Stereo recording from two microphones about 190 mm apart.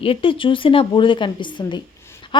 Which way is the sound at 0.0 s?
30° left (ahead or behind).